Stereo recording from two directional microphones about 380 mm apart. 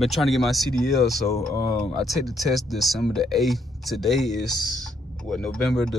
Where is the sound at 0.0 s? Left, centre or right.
Centre.